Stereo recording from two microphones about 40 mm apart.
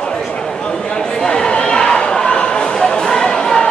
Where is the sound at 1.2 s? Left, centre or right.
Centre.